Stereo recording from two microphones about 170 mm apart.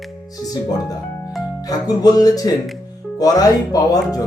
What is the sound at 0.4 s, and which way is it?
Speech, 20° left (ahead or behind).